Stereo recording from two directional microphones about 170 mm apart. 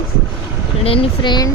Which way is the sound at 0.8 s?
35° left (ahead or behind).